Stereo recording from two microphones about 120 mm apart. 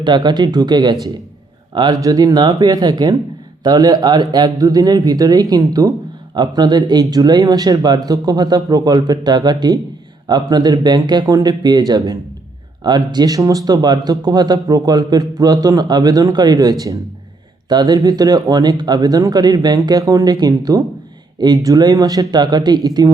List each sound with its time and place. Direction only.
0.0 s speech: 40° right (ahead or behind)